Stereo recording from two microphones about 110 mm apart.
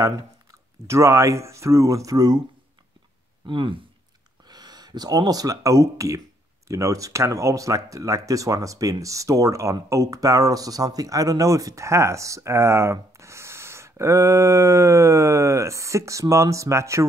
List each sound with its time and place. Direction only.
0.8 s speech: 25° right (ahead or behind)
3.4 s speech: 50° right (ahead or behind)
4.5 s speech: 40° right (ahead or behind)